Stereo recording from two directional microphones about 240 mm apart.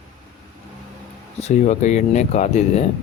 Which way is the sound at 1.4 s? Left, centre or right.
Left.